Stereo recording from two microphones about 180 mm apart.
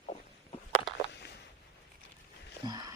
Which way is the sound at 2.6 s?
20° right (ahead or behind).